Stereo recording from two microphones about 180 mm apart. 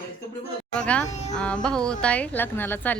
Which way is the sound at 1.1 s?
40° left (ahead or behind).